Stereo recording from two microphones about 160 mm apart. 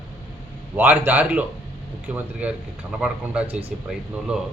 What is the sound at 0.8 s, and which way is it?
Speech, 10° right (ahead or behind).